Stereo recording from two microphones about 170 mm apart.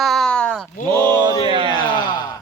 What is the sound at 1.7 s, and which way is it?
Speech, 25° left (ahead or behind).